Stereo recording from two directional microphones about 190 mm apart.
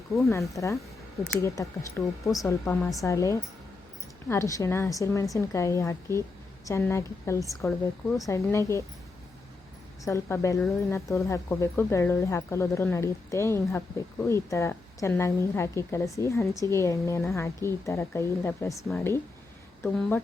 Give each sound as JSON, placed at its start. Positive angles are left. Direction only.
{"t": 0.3, "sound": "speech", "side_deg": 15}
{"t": 10.0, "sound": "speech", "side_deg": 15}